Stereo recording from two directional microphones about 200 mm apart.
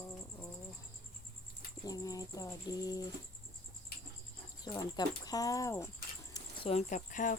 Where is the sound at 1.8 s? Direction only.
20° left (ahead or behind).